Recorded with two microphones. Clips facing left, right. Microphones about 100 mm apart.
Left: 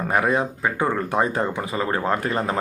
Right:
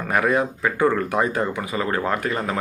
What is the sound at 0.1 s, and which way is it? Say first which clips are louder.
Speech: right 2 dB; 25° left (ahead or behind).